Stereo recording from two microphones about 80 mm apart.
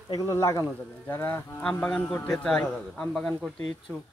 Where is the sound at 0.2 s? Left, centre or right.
Left.